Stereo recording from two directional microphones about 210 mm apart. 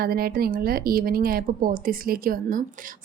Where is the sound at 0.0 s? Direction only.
45° right (ahead or behind).